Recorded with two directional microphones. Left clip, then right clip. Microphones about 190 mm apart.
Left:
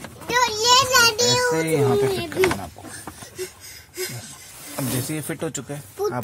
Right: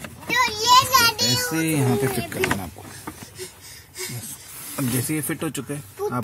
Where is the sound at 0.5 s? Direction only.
50° left (ahead or behind).